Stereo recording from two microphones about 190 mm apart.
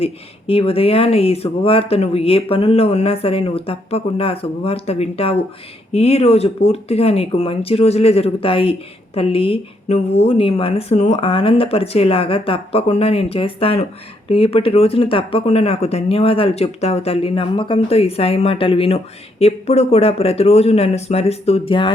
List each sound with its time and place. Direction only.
0.0 s speech: 30° left (ahead or behind)